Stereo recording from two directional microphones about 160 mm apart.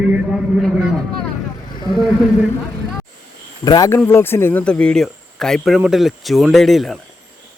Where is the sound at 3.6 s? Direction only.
30° left (ahead or behind).